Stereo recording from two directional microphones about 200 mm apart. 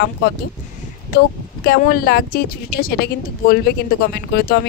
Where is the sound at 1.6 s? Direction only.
50° left (ahead or behind).